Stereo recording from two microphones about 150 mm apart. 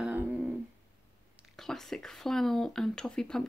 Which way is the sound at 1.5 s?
Centre (ahead or behind).